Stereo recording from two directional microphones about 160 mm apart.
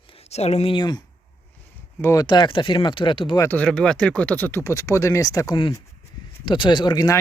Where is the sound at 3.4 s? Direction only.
10° left (ahead or behind).